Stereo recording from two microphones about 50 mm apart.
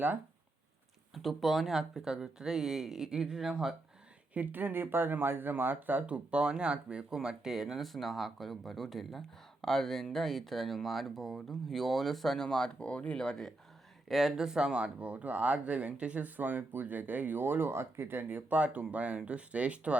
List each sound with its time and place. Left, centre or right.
1.1 s speech: centre
4.4 s speech: right
6.1 s speech: right
7.8 s speech: centre
14.1 s speech: centre; by 20.0 s right